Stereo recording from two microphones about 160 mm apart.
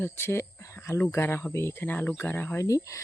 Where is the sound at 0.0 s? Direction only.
15° left (ahead or behind).